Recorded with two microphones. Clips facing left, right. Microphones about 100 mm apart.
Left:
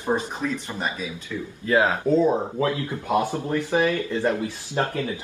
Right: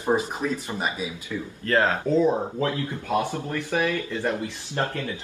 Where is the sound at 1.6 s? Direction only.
10° left (ahead or behind).